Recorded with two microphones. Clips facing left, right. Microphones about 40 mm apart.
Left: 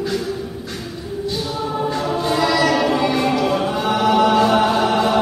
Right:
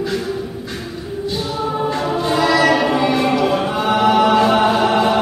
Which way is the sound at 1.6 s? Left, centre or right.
Centre.